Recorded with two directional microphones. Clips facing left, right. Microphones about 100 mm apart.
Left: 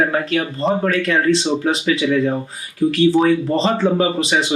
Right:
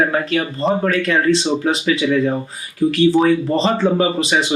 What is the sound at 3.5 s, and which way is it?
Speech, 15° right (ahead or behind).